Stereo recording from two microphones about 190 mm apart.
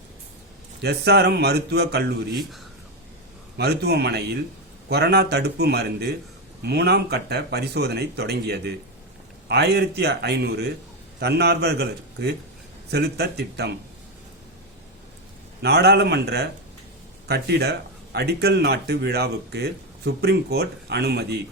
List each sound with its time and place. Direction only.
0.8 s speech: 60° right (ahead or behind)
3.6 s speech: 60° right (ahead or behind)
15.6 s speech: 60° right (ahead or behind)